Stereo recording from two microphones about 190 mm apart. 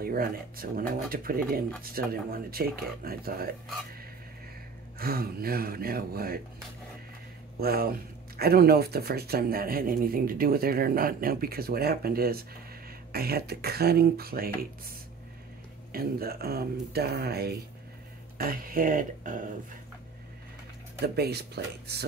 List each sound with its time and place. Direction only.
0.0 s speech: 50° right (ahead or behind)
4.9 s speech: 55° right (ahead or behind)
7.6 s speech: 55° right (ahead or behind)
15.9 s speech: 55° right (ahead or behind)
21.0 s speech: 55° right (ahead or behind)